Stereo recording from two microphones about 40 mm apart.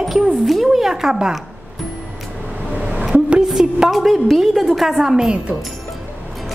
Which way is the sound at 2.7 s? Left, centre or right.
Right.